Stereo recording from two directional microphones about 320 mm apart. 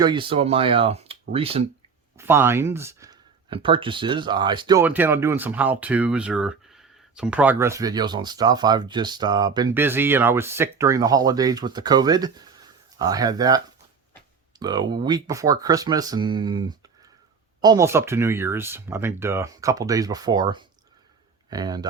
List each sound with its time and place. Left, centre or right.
0.0 s speech: centre
2.1 s speech: centre
14.6 s speech: centre